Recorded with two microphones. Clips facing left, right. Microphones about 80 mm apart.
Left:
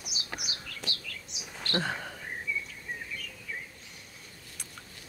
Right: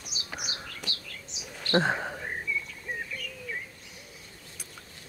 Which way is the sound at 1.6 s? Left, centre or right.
Right.